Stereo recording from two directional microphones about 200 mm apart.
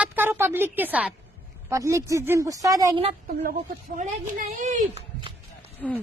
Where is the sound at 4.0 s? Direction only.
40° right (ahead or behind).